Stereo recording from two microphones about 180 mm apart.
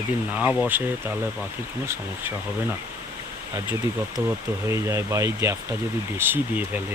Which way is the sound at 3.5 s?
15° right (ahead or behind).